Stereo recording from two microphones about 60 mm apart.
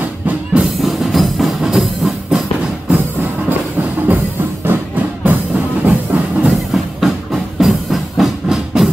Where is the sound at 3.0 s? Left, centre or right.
Right.